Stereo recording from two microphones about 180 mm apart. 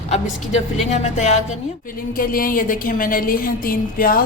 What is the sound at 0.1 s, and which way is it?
A woman's voice, 40° left (ahead or behind).